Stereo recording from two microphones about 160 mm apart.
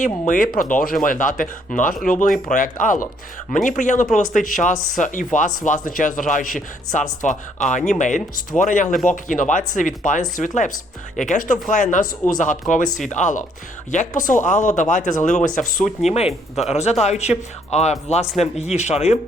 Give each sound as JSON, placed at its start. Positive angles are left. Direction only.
{"t": 0.0, "sound": "speech", "side_deg": 60}